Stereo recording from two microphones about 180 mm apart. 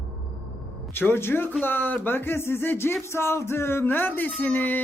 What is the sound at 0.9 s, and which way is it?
A child's voice, 10° left (ahead or behind).